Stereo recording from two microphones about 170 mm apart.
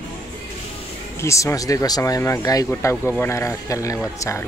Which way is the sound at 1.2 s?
15° left (ahead or behind).